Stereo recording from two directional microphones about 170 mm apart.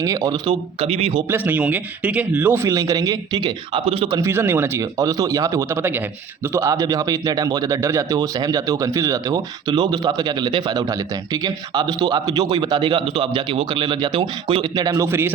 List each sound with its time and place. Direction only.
0.0 s speech: 20° right (ahead or behind)
0.8 s speech: 35° right (ahead or behind)
1.3 s speech: 10° right (ahead or behind); by 4.2 s 35° right (ahead or behind)
4.2 s speech: 15° right (ahead or behind)